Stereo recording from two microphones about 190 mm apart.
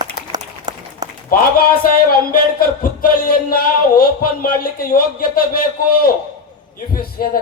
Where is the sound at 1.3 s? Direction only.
50° left (ahead or behind).